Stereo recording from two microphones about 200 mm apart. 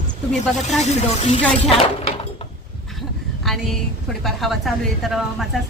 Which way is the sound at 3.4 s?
Centre (ahead or behind).